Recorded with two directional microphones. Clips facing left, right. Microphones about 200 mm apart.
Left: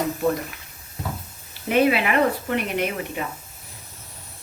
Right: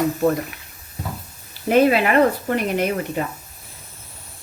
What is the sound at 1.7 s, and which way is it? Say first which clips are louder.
Speech: right 4 dB; 40° right (ahead or behind).